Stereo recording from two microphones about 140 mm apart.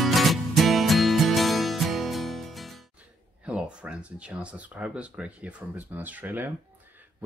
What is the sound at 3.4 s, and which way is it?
Speech, 10° right (ahead or behind).